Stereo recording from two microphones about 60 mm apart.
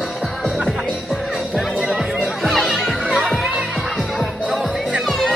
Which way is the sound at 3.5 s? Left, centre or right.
Centre.